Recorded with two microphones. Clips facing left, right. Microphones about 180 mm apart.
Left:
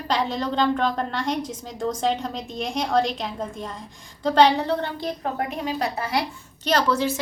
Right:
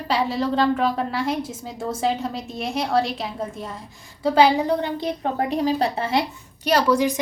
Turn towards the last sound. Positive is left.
turn(degrees=-15)  # may be behind; listen again after turning